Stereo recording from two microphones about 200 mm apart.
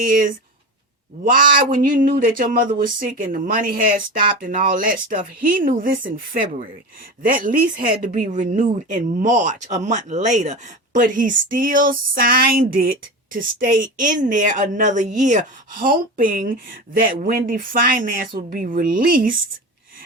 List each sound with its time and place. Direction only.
0.0 s speech: 40° right (ahead or behind)